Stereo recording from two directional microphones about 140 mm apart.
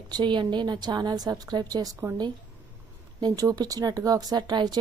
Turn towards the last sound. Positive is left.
turn(degrees=-30)  # may be behind; listen again after turning